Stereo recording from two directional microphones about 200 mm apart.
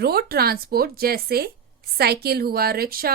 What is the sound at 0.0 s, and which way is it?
Speech, 50° right (ahead or behind).